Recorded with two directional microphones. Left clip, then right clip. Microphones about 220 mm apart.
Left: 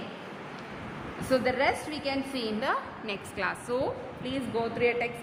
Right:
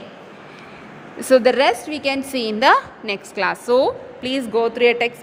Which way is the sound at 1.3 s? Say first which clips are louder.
Right 12 dB; 45° right (ahead or behind).